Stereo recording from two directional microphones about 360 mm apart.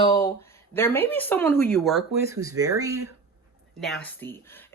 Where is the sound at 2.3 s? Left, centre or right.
Centre.